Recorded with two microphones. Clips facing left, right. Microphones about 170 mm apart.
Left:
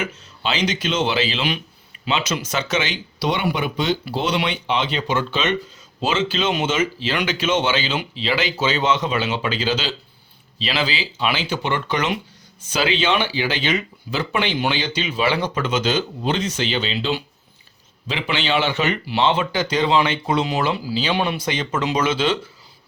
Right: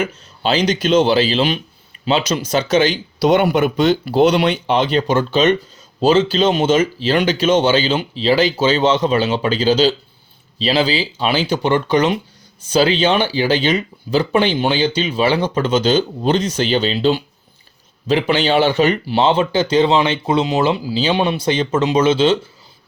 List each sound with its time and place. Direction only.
0.0 s speech: 40° right (ahead or behind)